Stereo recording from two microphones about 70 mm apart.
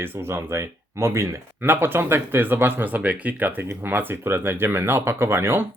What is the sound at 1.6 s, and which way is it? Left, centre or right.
Speech, right.